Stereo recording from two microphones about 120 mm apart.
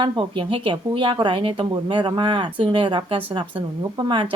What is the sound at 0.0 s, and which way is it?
Speech, 45° right (ahead or behind).